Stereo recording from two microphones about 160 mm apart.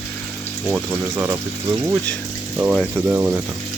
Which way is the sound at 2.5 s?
10° right (ahead or behind).